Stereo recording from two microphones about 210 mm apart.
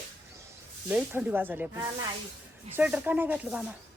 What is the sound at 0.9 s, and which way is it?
A woman's voice, 10° right (ahead or behind).